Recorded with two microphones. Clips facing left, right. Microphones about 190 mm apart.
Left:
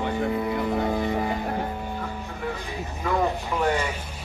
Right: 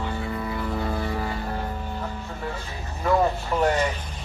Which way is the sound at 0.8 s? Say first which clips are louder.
Left 3 dB; 20° left (ahead or behind).